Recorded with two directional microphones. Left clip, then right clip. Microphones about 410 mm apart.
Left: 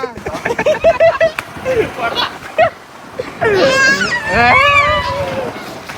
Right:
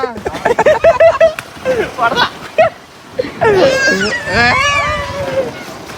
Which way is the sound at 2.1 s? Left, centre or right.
Right.